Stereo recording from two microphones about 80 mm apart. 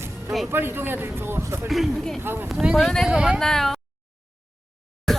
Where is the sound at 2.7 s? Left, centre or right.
Centre.